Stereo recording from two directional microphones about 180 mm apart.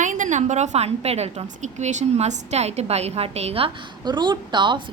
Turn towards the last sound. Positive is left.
turn(degrees=-25)  # may be behind; listen again after turning